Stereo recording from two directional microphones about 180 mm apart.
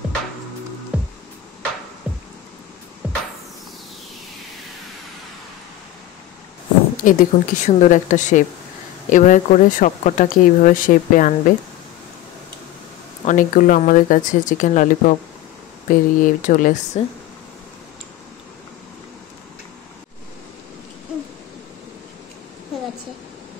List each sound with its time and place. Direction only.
0.9 s music: 5° right (ahead or behind)
2.1 s a sound: 5° right (ahead or behind)
3.0 s music: 10° right (ahead or behind)
7.0 s speech: 50° left (ahead or behind)
13.2 s speech: 45° left (ahead or behind)